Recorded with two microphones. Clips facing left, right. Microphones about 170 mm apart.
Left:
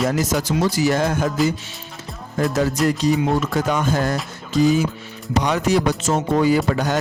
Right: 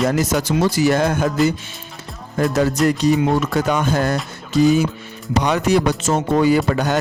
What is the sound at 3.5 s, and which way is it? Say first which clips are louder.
Speech: right 2 dB; 65° right (ahead or behind).